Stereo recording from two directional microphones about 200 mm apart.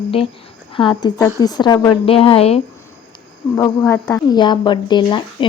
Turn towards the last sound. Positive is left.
turn(degrees=25)  # may be behind; listen again after turning